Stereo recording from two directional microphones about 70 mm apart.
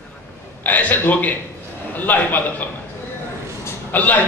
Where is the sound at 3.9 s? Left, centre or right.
Left.